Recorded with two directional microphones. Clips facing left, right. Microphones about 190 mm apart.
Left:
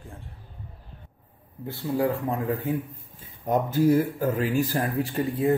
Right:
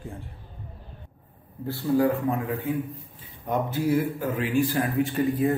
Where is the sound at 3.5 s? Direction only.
40° left (ahead or behind).